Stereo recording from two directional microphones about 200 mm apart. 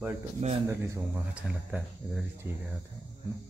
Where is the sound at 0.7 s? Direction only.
10° right (ahead or behind).